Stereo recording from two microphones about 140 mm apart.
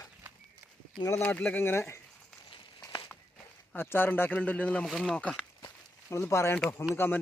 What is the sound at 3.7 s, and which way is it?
Speech, 15° left (ahead or behind).